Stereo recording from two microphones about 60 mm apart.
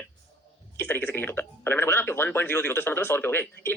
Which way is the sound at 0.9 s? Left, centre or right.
Left.